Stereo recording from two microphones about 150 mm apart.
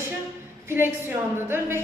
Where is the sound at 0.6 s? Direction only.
15° right (ahead or behind).